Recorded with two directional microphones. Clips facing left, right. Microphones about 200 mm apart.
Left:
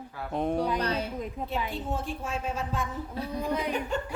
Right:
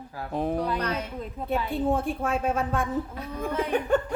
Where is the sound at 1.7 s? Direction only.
55° right (ahead or behind).